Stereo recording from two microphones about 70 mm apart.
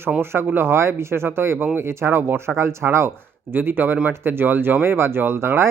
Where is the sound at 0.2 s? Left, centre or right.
Right.